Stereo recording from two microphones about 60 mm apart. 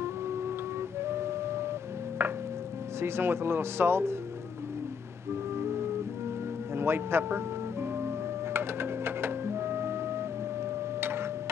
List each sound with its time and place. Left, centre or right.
1.0 s music: right
3.0 s speech: right
6.7 s music: right
11.0 s tick-tock: right